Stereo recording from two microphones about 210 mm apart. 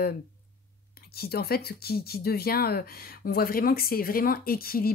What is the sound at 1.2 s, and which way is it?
Speech, 45° left (ahead or behind).